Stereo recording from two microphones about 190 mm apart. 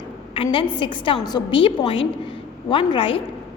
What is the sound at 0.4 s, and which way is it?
A woman's voice, 25° left (ahead or behind).